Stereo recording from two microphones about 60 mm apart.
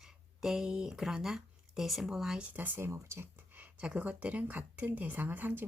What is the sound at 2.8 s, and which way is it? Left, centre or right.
Speech, right.